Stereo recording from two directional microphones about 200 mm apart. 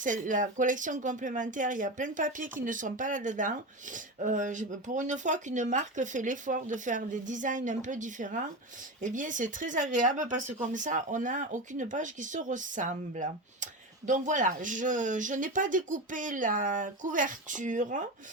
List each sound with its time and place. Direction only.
0.0 s speech: 40° right (ahead or behind)